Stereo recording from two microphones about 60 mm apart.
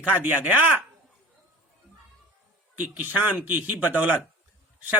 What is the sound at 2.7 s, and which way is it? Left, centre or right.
A man's voice, right.